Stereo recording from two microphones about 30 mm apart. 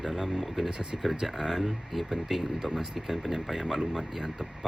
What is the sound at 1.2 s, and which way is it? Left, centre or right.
Speech, centre.